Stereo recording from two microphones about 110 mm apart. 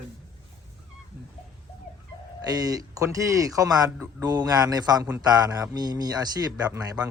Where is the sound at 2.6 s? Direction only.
35° right (ahead or behind).